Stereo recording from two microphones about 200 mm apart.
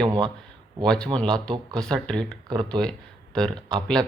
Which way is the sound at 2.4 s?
20° right (ahead or behind).